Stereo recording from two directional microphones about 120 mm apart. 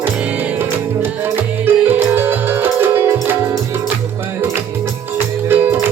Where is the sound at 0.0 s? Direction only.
15° right (ahead or behind).